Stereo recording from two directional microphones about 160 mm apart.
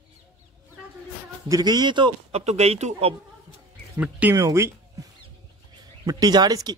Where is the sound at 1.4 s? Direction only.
25° right (ahead or behind); by 3.1 s 45° right (ahead or behind).